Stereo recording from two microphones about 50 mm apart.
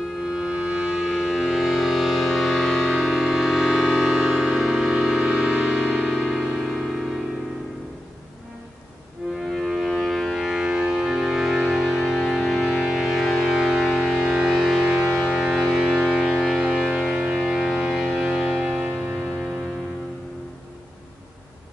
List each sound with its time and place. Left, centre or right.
0.2 s music: centre
4.1 s music: centre
5.2 s music: right; by 7.1 s centre
9.5 s civil defense siren: centre
10.4 s music: centre
14.2 s a sound: centre
14.8 s music: right
15.3 s music: centre
16.2 s a sound: centre
16.6 s music: centre
17.1 s music: right
17.4 s music: centre